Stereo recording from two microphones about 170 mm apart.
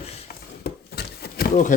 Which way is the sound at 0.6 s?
70° left (ahead or behind).